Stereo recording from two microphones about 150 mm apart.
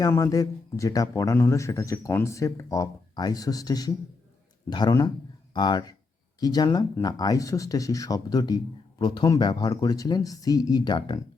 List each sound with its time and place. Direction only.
0.0 s speech: 20° left (ahead or behind)